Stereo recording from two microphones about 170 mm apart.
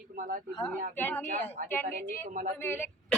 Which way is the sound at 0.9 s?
10° left (ahead or behind).